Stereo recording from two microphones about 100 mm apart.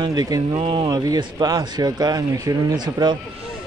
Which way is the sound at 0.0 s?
45° right (ahead or behind).